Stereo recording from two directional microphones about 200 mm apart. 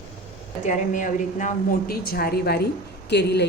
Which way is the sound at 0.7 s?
40° left (ahead or behind).